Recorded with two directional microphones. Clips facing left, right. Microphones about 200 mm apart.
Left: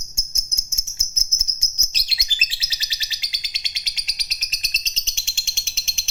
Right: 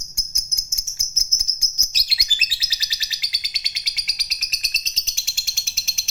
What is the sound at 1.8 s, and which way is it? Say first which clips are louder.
Chirp: right 1 dB; 25° left (ahead or behind).